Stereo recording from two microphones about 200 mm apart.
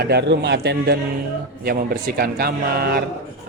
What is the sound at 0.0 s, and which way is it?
A man's voice, 55° right (ahead or behind).